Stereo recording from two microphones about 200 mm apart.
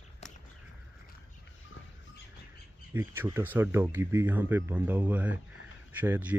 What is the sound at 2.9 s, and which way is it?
Speech, 10° right (ahead or behind).